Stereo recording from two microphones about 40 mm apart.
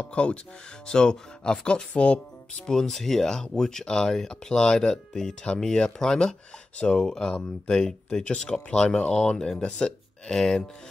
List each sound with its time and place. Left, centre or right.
0.0 s speech: left
2.6 s speech: centre